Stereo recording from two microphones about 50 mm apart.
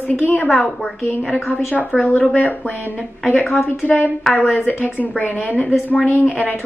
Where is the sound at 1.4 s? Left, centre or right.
Left.